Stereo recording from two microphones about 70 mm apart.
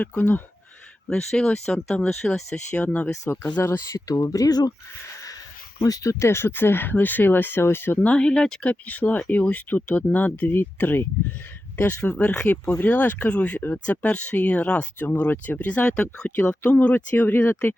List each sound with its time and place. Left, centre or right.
0.2 s speech: left
1.1 s speech: centre
2.7 s speech: centre
3.6 s speech: left
4.1 s speech: left
5.8 s speech: left
8.0 s speech: centre
8.7 s speech: left